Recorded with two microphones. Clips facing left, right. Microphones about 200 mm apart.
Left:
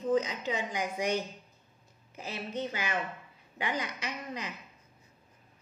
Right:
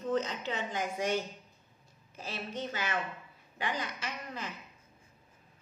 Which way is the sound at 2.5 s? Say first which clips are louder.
Left 2 dB; 15° left (ahead or behind).